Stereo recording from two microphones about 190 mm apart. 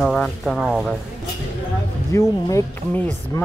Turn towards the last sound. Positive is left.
turn(degrees=15)  # may be behind; listen again after turning